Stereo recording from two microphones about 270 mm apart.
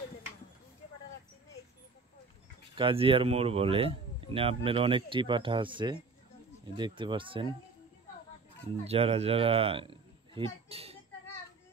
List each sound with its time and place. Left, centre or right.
2.7 s speech: centre
8.8 s a woman's voice: right